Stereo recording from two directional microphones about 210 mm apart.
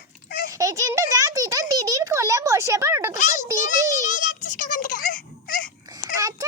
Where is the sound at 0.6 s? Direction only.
15° right (ahead or behind).